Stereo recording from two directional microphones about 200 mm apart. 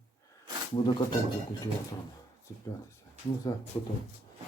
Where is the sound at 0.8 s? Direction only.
25° left (ahead or behind).